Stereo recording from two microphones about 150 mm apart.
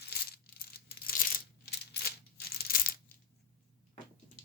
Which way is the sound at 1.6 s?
90° left.